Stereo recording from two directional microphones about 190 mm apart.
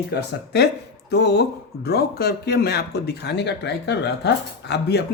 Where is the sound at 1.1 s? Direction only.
60° left (ahead or behind).